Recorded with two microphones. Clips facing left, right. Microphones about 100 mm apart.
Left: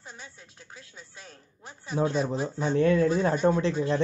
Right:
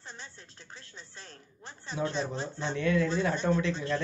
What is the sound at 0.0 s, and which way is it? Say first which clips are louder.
A woman's voice: left 1 dB; 5° left (ahead or behind).